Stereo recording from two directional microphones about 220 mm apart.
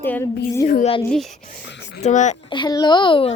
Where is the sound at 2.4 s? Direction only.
20° left (ahead or behind).